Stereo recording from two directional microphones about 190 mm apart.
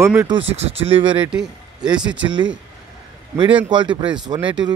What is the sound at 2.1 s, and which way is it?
Speech, 75° right (ahead or behind).